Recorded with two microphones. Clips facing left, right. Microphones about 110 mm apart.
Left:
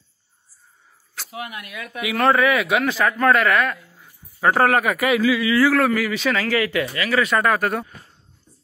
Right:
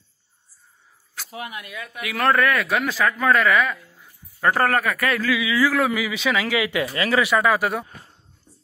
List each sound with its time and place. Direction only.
2.0 s speech: centre (ahead or behind); by 7.2 s 20° right (ahead or behind)
7.2 s speech: 5° right (ahead or behind)